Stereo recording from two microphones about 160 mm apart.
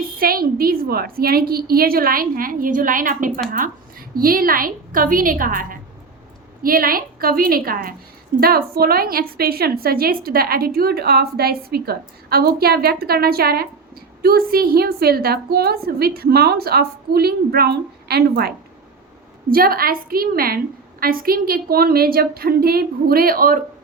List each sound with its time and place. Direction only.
0.2 s a woman's voice: 65° right (ahead or behind)
19.5 s a woman's voice: 65° right (ahead or behind)